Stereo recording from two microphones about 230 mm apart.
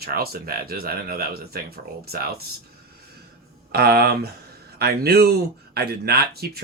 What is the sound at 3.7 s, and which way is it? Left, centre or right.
Speech, right.